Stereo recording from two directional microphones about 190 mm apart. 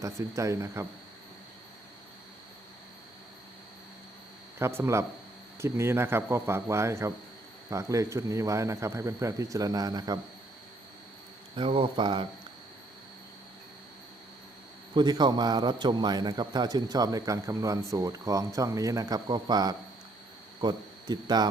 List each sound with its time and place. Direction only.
0.0 s speech: 15° right (ahead or behind)
4.6 s speech: 15° right (ahead or behind)
11.5 s a man's voice: 30° right (ahead or behind)
14.9 s a man's voice: 20° right (ahead or behind)